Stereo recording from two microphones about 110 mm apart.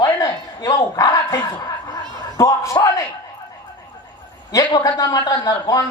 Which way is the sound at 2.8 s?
40° left (ahead or behind).